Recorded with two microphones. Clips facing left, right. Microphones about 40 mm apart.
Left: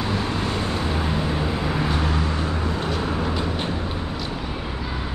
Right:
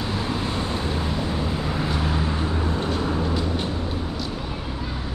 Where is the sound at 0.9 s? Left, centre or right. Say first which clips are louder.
Left 2 dB; left.